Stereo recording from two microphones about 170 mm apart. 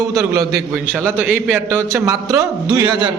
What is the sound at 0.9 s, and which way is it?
A man's voice, 5° right (ahead or behind).